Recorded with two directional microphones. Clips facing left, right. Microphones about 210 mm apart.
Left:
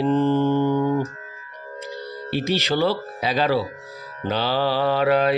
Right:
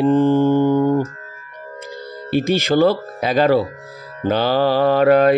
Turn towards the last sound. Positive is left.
turn(degrees=-50)  # may be behind; listen again after turning